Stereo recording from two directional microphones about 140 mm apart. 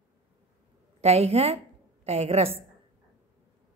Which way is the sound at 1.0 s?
50° right (ahead or behind).